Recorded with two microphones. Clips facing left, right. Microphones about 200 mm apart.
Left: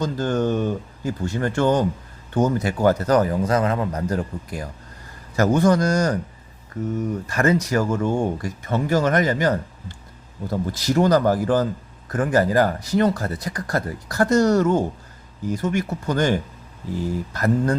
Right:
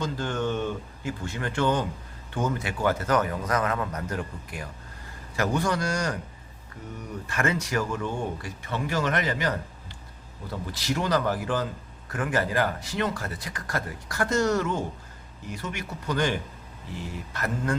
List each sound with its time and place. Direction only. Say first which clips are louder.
0.0 s speech: left 7 dB; 40° left (ahead or behind)
7.3 s speech: left 6 dB; 40° left (ahead or behind)